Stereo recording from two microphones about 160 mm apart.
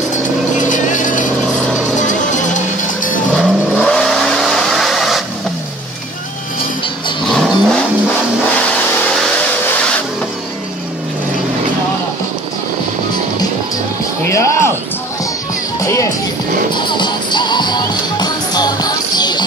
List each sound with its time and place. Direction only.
0.6 s vehicle: 50° left (ahead or behind)
2.0 s music: 50° left (ahead or behind)
3.3 s vehicle: 5° left (ahead or behind)
7.2 s vehicle: centre (ahead or behind)
14.2 s a sound: 20° left (ahead or behind)
15.8 s music: 20° left (ahead or behind)